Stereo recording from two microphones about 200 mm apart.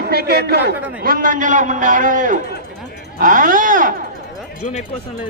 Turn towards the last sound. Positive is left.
turn(degrees=-40)  # may be behind; listen again after turning